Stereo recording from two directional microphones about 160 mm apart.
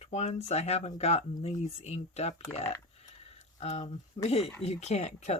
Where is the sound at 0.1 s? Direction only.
45° left (ahead or behind).